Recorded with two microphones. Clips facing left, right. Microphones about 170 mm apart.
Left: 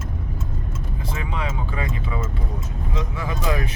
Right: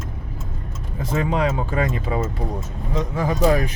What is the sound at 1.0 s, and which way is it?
Speech, 45° right (ahead or behind).